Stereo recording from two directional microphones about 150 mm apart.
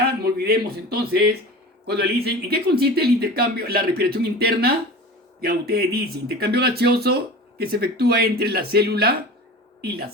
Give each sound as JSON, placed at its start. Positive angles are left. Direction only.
{"t": 0.0, "sound": "speech", "side_deg": -90}